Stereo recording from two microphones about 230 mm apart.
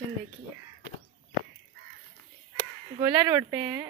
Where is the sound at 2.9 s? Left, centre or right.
Centre.